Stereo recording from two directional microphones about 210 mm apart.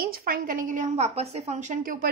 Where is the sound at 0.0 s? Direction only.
45° right (ahead or behind).